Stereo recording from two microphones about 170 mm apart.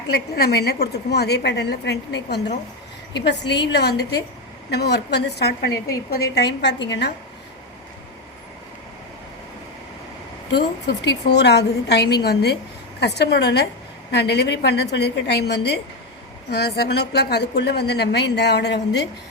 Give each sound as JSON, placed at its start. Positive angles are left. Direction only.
{"t": 0.1, "sound": "a woman's voice", "side_deg": 70}
{"t": 10.5, "sound": "a woman's voice", "side_deg": 75}